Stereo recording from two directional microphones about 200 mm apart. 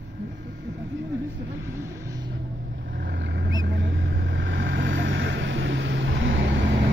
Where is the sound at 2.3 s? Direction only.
65° right (ahead or behind).